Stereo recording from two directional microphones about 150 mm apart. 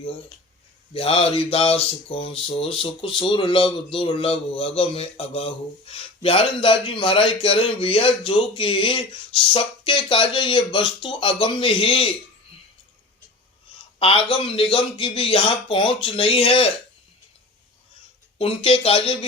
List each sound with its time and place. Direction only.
0.9 s speech: 40° left (ahead or behind)
14.0 s speech: 40° left (ahead or behind)
18.3 s speech: 40° left (ahead or behind)